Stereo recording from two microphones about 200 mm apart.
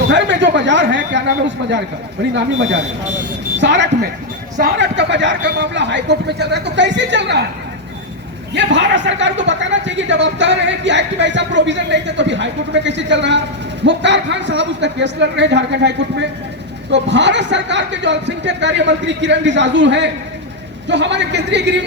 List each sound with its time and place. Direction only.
0.1 s speech: 60° right (ahead or behind)
8.5 s speech: 60° right (ahead or behind)